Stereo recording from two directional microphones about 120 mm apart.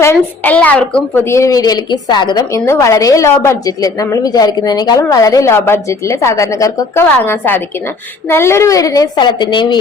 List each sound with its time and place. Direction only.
0.0 s a woman's voice: 25° left (ahead or behind)
0.5 s a woman's voice: 15° left (ahead or behind); by 2.6 s 35° left (ahead or behind)
2.6 s a woman's voice: 25° left (ahead or behind); by 9.8 s 40° left (ahead or behind)